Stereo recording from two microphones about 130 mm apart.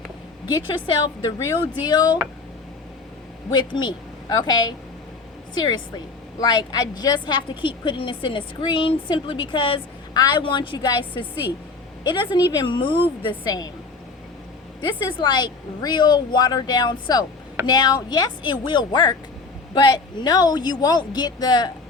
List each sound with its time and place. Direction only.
0.4 s a woman's voice: 35° left (ahead or behind)
3.5 s a woman's voice: 35° left (ahead or behind)
13.4 s a woman's voice: 30° left (ahead or behind)
14.8 s a woman's voice: 40° left (ahead or behind)